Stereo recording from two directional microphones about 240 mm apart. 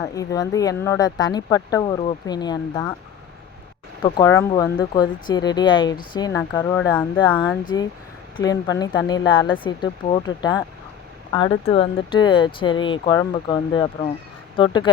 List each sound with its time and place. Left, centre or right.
0.0 s speech: centre
4.0 s speech: centre